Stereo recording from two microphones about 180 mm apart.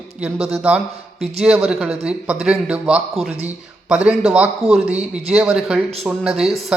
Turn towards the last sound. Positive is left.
turn(degrees=0)  # may be behind; listen again after turning